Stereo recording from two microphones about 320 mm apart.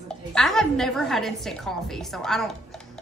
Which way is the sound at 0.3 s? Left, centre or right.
Centre.